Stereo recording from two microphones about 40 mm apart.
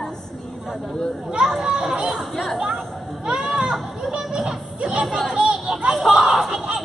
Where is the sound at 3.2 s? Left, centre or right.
Centre.